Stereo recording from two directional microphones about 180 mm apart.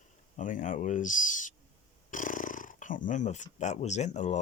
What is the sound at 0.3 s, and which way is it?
Speech, 45° left (ahead or behind).